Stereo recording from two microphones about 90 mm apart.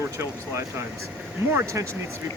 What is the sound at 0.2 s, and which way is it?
Speech, 30° right (ahead or behind).